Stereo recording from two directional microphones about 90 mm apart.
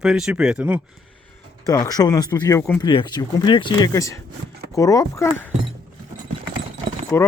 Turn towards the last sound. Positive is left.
turn(degrees=25)  # may be behind; listen again after turning